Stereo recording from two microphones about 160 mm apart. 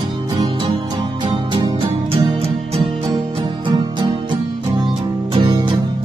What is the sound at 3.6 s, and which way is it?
Music, 30° right (ahead or behind).